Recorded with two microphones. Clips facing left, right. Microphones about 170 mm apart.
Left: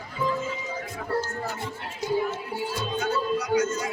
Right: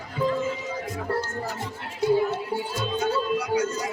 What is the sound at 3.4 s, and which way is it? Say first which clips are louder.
Music: left 1 dB; 30° right (ahead or behind).